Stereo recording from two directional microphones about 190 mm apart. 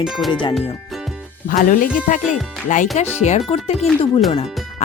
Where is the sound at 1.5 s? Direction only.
45° left (ahead or behind).